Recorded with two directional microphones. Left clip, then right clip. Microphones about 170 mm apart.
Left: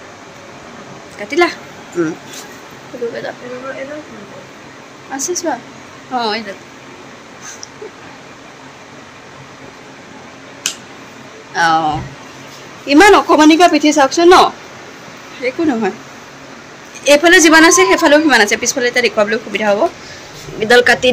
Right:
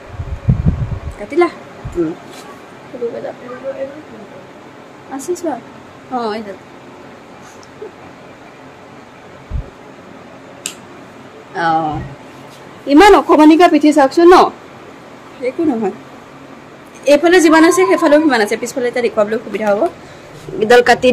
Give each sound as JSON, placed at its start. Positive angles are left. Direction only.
{"t": 1.2, "sound": "a woman's voice", "side_deg": -5}
{"t": 5.1, "sound": "speech", "side_deg": -20}
{"t": 11.5, "sound": "a woman's voice", "side_deg": -15}
{"t": 15.4, "sound": "speech", "side_deg": -5}
{"t": 17.0, "sound": "a woman's voice", "side_deg": -10}
{"t": 20.5, "sound": "speech", "side_deg": -30}